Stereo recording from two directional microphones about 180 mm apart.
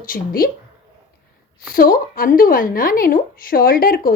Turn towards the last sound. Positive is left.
turn(degrees=50)  # may be behind; listen again after turning